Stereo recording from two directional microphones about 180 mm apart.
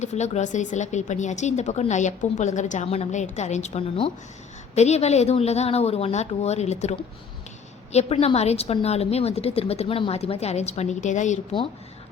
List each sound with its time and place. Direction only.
0.0 s speech: 40° left (ahead or behind)
7.9 s speech: 35° left (ahead or behind)